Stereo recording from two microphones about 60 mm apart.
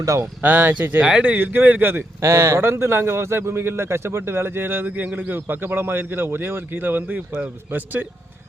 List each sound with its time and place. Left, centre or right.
0.4 s speech: right
2.2 s a man's voice: right